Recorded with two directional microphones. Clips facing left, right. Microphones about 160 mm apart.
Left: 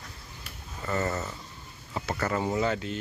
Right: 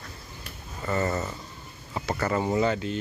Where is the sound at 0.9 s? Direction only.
10° right (ahead or behind).